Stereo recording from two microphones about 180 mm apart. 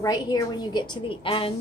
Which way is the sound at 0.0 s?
20° left (ahead or behind).